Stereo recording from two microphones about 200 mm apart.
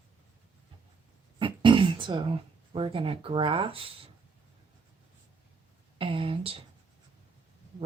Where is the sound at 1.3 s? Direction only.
25° right (ahead or behind).